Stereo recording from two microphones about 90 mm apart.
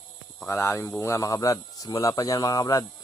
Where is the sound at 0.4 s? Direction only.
25° left (ahead or behind).